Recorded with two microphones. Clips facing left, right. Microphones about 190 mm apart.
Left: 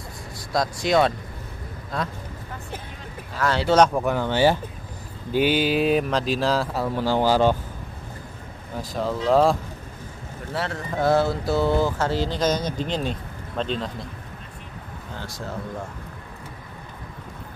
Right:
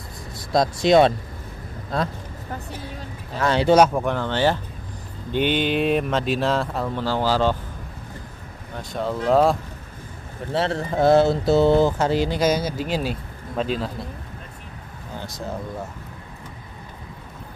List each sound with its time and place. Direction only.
0.5 s speech: 25° right (ahead or behind)
3.3 s speech: 20° right (ahead or behind)
3.8 s speech: centre (ahead or behind)
8.7 s speech: centre (ahead or behind)
10.5 s speech: 25° right (ahead or behind); by 14.0 s 5° right (ahead or behind)
15.1 s speech: 20° right (ahead or behind)